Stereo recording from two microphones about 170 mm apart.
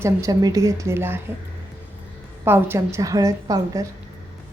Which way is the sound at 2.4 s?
15° right (ahead or behind).